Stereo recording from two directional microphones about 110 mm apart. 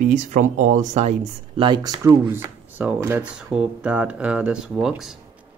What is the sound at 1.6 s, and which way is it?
Speech, 40° right (ahead or behind).